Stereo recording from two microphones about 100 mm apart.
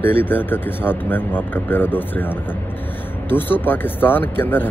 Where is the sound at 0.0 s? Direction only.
20° left (ahead or behind).